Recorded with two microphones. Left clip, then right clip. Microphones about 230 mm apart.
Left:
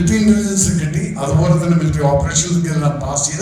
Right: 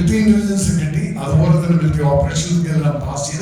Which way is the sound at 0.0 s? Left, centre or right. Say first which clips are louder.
Left 1 dB; centre.